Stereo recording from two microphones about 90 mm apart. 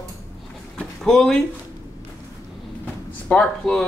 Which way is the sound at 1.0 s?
5° left (ahead or behind).